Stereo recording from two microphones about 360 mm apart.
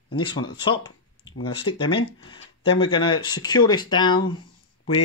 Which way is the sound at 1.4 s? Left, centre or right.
Centre.